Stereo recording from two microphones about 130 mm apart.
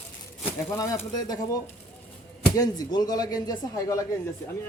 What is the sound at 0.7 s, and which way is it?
Speech, 25° left (ahead or behind).